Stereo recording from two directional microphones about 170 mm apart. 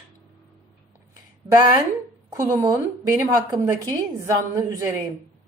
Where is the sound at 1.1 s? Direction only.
25° right (ahead or behind).